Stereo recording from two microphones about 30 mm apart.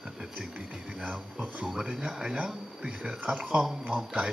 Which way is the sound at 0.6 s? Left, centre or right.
Right.